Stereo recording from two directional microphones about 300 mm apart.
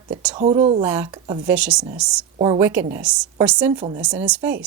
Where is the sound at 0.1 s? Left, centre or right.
Centre.